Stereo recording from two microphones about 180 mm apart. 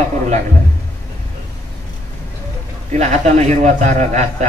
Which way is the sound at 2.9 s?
40° right (ahead or behind).